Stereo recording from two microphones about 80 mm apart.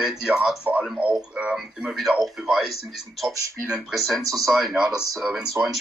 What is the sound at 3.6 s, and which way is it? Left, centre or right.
Speech, centre.